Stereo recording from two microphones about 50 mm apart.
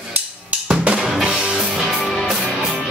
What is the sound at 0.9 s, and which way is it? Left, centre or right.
Drum kit, centre.